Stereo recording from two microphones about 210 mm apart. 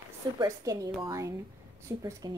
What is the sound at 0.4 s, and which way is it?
Speech, 15° right (ahead or behind).